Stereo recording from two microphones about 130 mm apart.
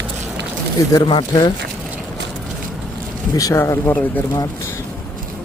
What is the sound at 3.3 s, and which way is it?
Speech, 25° left (ahead or behind).